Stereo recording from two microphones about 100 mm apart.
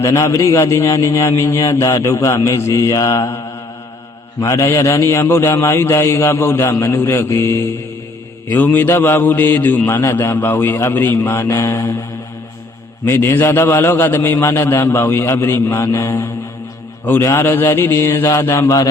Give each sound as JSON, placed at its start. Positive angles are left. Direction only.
{"t": 0.0, "sound": "a man's voice", "side_deg": 25}
{"t": 13.1, "sound": "a man's voice", "side_deg": 25}